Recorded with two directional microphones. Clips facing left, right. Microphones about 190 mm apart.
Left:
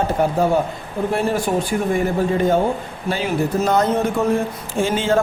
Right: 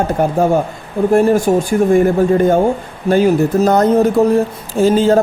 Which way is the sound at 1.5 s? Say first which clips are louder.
Right 8 dB; 40° right (ahead or behind).